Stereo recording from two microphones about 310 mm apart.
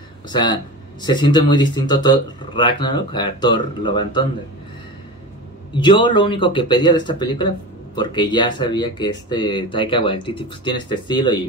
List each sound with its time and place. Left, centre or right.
0.3 s speech: centre
5.8 s speech: centre